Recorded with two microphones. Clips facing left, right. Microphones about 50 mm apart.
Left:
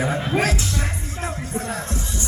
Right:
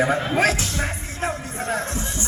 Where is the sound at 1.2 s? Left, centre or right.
Right.